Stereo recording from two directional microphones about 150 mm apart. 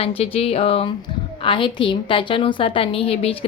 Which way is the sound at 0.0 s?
40° left (ahead or behind).